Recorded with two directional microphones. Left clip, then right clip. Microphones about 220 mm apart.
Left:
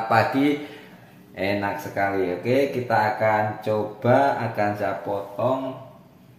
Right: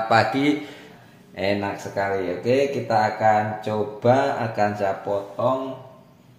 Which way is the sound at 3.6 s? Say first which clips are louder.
Right 2 dB; 15° right (ahead or behind).